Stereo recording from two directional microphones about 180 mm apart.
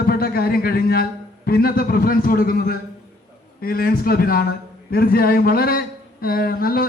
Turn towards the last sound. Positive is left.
turn(degrees=55)  # may be behind; listen again after turning